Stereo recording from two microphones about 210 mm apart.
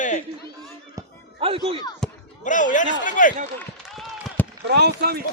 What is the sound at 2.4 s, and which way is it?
Speech, 35° left (ahead or behind).